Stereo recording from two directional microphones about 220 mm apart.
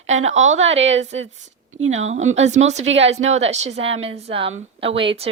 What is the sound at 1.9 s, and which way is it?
A woman's voice, 30° right (ahead or behind).